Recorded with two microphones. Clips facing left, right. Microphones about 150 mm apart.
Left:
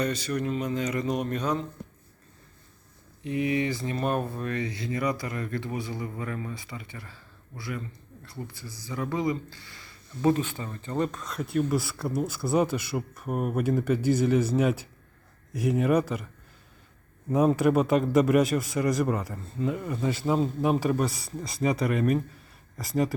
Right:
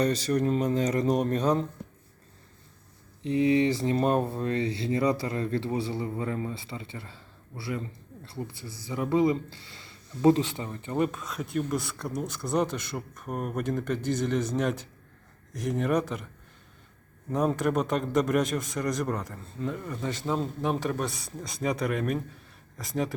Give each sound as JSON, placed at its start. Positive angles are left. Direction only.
{"t": 0.0, "sound": "speech", "side_deg": -35}
{"t": 3.2, "sound": "speech", "side_deg": -25}
{"t": 17.2, "sound": "speech", "side_deg": 5}